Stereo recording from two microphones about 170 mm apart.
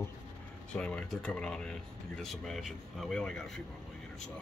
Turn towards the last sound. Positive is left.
turn(degrees=0)  # may be behind; listen again after turning